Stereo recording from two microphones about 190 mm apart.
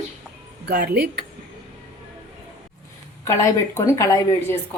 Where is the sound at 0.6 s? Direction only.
55° right (ahead or behind).